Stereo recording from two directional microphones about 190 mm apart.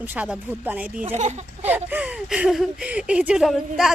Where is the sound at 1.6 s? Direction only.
10° right (ahead or behind).